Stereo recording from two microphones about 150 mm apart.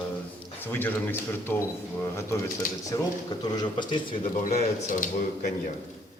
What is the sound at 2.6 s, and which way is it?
Speech, 65° left (ahead or behind).